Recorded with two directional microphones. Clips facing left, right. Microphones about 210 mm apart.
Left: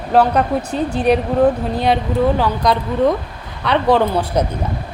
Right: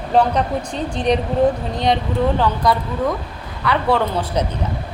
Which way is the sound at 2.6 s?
15° left (ahead or behind).